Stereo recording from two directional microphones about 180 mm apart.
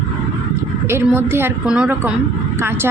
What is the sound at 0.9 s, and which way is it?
A woman's voice, 15° right (ahead or behind).